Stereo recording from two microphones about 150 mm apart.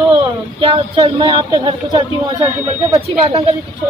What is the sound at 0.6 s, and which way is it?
A man's voice, 35° right (ahead or behind).